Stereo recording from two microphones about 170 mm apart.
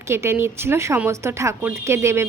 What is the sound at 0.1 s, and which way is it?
A woman's voice, 15° right (ahead or behind).